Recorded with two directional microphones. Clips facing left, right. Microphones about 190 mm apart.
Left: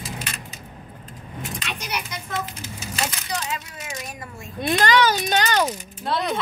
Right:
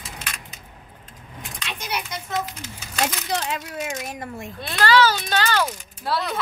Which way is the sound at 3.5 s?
55° right (ahead or behind).